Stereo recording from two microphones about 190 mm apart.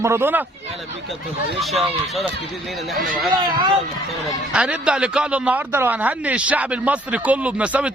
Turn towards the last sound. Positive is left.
turn(degrees=-5)  # may be behind; listen again after turning